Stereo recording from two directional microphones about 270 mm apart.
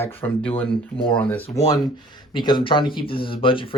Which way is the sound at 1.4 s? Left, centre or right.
Centre.